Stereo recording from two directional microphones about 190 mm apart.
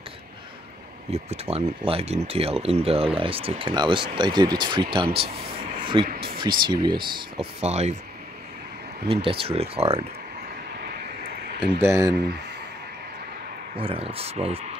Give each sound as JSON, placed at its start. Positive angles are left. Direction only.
{"t": 1.1, "sound": "speech", "side_deg": -35}
{"t": 5.8, "sound": "a sound", "side_deg": -25}
{"t": 6.6, "sound": "speech", "side_deg": -25}
{"t": 9.0, "sound": "speech", "side_deg": -30}
{"t": 11.8, "sound": "speech", "side_deg": -15}
{"t": 13.7, "sound": "speech", "side_deg": -30}